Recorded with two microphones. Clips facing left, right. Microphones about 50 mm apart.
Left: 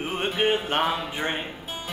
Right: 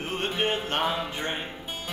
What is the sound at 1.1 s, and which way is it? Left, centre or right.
Speech, centre.